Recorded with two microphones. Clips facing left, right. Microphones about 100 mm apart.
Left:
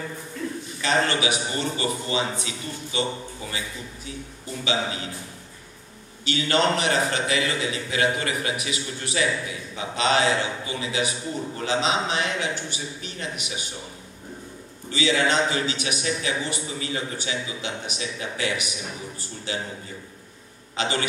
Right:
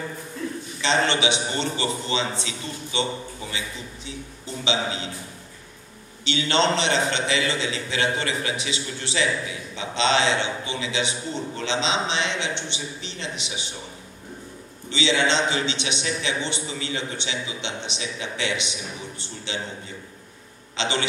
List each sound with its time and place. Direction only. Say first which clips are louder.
0.8 s a man's voice: right 1 dB; 25° right (ahead or behind)
4.6 s a man's voice: right 1 dB; 25° right (ahead or behind)
6.2 s a man's voice: even; 25° right (ahead or behind)
14.9 s a man's voice: even; 25° right (ahead or behind)
20.7 s a man's voice: even; 25° right (ahead or behind)